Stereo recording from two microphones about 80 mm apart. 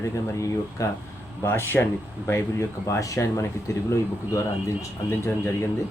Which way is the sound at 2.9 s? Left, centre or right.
Left.